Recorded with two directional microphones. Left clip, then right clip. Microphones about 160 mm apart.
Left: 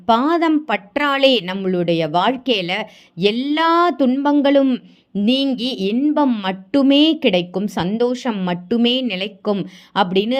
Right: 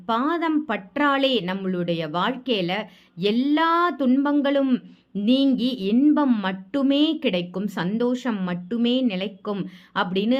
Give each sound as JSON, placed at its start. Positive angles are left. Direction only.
{"t": 0.0, "sound": "a woman's voice", "side_deg": 35}
{"t": 5.5, "sound": "a woman's voice", "side_deg": 30}
{"t": 6.1, "sound": "a woman's voice", "side_deg": 20}
{"t": 6.4, "sound": "a woman's voice", "side_deg": 30}